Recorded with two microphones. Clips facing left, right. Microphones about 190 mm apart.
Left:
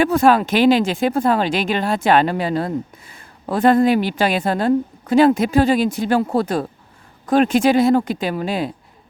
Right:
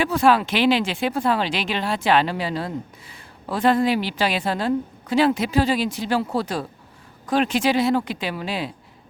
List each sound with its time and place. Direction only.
0.0 s speech: 50° left (ahead or behind)